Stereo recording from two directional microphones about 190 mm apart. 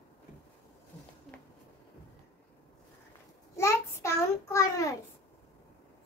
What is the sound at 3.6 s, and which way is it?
Child singing, 15° left (ahead or behind).